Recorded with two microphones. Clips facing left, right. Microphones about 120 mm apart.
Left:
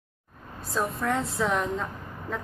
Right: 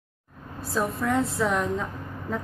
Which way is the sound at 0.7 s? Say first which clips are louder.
Right 2 dB; centre (ahead or behind).